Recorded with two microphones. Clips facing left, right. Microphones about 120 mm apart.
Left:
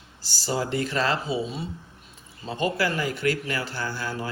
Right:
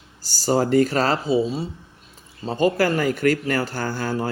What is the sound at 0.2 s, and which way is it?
Speech, 45° right (ahead or behind).